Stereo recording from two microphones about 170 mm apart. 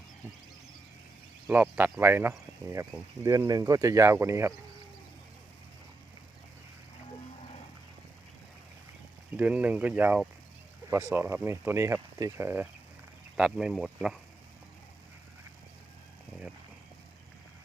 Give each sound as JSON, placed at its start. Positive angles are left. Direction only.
{"t": 1.5, "sound": "speech", "side_deg": -10}
{"t": 9.3, "sound": "speech", "side_deg": -10}